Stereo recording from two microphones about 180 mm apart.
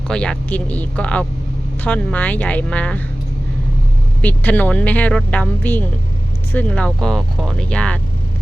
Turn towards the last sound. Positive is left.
turn(degrees=5)  # may be behind; listen again after turning